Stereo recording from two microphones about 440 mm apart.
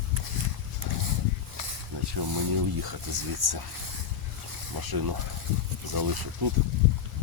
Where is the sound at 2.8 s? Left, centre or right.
Right.